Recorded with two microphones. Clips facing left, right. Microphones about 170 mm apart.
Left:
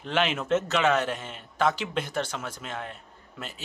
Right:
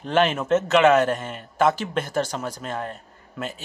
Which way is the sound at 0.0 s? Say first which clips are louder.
Right 6 dB; 45° right (ahead or behind).